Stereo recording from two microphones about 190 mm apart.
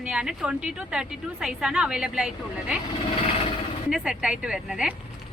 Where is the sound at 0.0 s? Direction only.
5° right (ahead or behind).